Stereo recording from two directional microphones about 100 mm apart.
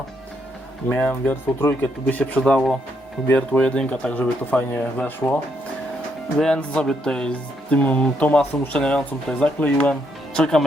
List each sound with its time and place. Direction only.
0.9 s speech: 15° left (ahead or behind)
3.2 s speech: 20° left (ahead or behind)
6.4 s speech: 10° left (ahead or behind)